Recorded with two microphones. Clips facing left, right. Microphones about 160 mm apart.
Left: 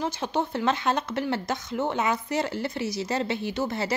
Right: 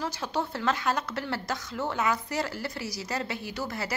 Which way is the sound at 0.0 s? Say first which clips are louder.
Left 3 dB; 20° left (ahead or behind).